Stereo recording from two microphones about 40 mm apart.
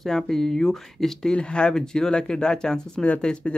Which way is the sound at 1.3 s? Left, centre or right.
Left.